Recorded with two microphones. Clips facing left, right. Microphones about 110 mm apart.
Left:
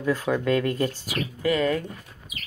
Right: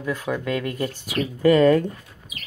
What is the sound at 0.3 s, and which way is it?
Speech, 35° left (ahead or behind).